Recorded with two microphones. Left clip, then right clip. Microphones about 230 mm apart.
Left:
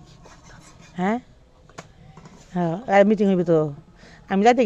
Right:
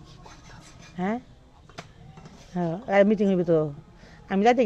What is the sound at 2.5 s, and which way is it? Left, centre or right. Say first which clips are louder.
Speech: left 4 dB; left.